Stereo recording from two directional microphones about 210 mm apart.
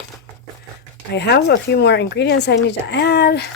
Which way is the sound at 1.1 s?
55° left (ahead or behind).